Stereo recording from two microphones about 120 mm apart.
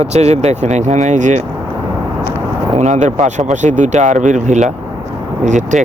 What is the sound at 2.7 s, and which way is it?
Speech, 80° right.